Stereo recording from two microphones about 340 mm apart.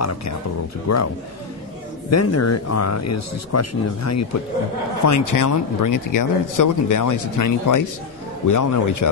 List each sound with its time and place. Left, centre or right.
0.8 s a man's voice: left